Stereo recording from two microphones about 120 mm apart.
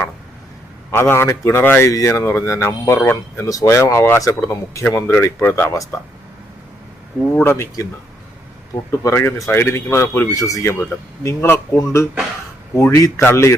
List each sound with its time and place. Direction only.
0.9 s speech: 20° left (ahead or behind)
1.9 s speech: 25° left (ahead or behind)
7.4 s speech: 20° left (ahead or behind)